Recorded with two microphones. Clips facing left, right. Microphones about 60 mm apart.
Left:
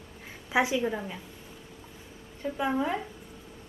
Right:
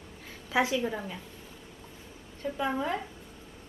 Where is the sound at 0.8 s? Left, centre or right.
Centre.